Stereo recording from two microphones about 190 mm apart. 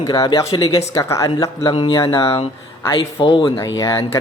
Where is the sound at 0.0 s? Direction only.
20° left (ahead or behind).